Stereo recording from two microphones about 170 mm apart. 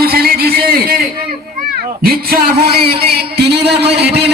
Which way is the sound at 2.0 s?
65° right (ahead or behind).